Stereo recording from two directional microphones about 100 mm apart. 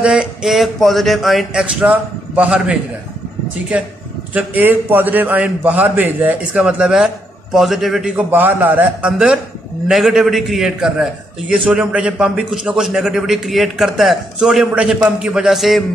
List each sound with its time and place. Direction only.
0.0 s a man's voice: 10° right (ahead or behind)
8.2 s a man's voice: 20° right (ahead or behind)
9.8 s a man's voice: 5° right (ahead or behind)